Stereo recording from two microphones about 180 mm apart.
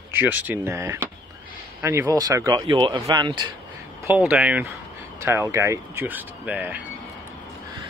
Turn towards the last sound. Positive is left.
turn(degrees=-10)  # may be behind; listen again after turning